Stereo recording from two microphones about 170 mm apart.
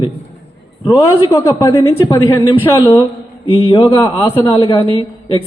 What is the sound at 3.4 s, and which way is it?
Speech, 30° left (ahead or behind).